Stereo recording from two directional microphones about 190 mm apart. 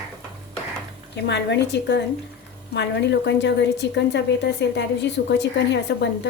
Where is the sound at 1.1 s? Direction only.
65° left (ahead or behind).